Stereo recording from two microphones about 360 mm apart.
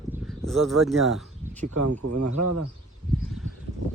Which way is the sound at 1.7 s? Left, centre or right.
Right.